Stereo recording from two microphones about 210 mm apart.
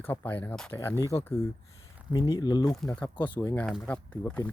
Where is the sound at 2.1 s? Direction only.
20° left (ahead or behind).